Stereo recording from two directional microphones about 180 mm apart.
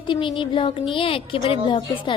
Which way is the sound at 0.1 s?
25° left (ahead or behind).